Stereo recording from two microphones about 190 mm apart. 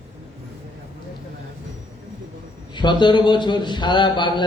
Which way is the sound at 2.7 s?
25° left (ahead or behind).